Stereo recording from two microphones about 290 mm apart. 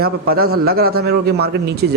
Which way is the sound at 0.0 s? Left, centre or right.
Right.